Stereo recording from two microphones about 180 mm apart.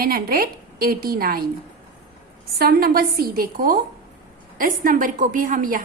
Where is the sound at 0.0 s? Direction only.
55° right (ahead or behind).